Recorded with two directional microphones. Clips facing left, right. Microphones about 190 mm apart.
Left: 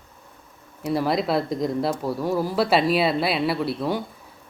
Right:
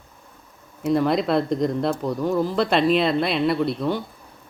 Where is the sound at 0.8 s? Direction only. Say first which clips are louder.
Right 3 dB; 5° left (ahead or behind).